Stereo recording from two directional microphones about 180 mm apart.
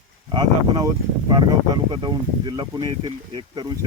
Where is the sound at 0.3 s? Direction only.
25° right (ahead or behind).